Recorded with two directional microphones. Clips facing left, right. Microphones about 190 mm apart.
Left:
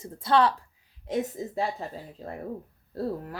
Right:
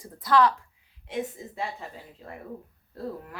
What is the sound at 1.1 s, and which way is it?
Speech, 40° left (ahead or behind).